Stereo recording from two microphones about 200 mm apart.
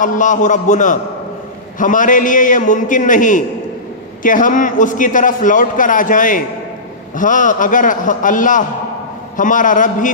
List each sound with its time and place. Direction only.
0.0 s a man's voice: 40° left (ahead or behind)